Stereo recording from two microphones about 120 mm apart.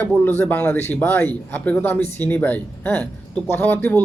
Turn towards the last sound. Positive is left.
turn(degrees=15)  # may be behind; listen again after turning